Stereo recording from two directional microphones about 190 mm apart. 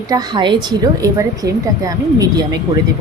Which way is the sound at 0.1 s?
20° right (ahead or behind).